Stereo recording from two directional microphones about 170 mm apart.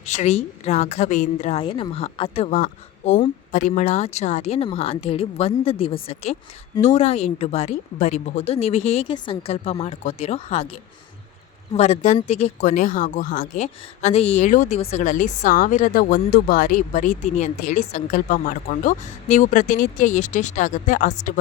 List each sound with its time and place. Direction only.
0.0 s a woman's voice: 45° left (ahead or behind)
1.6 s speech: 30° left (ahead or behind)
11.7 s a woman's voice: 40° left (ahead or behind)